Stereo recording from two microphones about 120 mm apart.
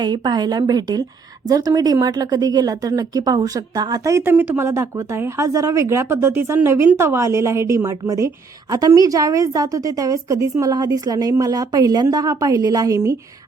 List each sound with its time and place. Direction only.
0.0 s a woman's voice: 35° right (ahead or behind)